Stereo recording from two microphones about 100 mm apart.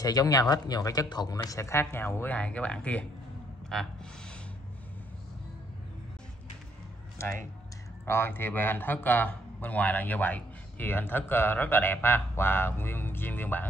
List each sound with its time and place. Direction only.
0.0 s a man's voice: 40° left (ahead or behind); by 4.4 s 5° left (ahead or behind)
8.0 s a man's voice: 25° left (ahead or behind)